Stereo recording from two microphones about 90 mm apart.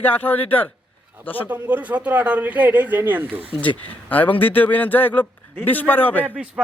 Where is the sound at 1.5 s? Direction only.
20° right (ahead or behind).